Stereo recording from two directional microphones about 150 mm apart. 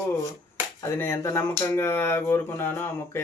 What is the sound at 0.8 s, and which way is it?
Speech, 15° left (ahead or behind).